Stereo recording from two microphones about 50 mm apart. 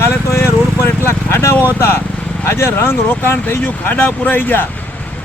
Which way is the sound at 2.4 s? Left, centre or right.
Left.